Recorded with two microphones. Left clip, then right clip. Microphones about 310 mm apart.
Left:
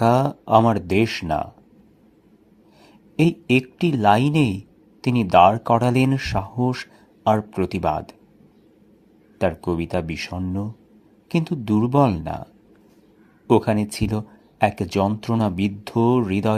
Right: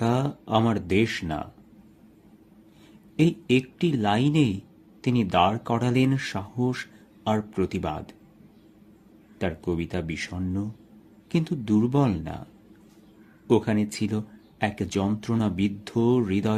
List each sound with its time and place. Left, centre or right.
0.0 s speech: centre
3.2 s speech: centre
9.4 s speech: centre
13.5 s speech: centre